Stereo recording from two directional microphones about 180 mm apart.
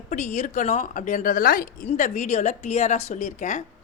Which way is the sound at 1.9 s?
40° left (ahead or behind).